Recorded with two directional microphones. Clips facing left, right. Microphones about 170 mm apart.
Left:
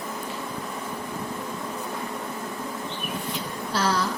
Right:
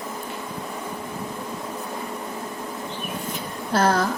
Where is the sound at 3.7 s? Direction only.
50° right (ahead or behind).